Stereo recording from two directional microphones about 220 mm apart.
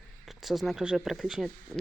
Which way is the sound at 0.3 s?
Centre (ahead or behind).